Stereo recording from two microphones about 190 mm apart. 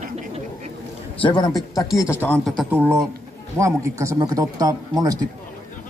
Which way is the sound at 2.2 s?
10° left (ahead or behind).